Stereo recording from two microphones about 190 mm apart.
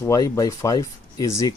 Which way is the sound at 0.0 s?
20° left (ahead or behind).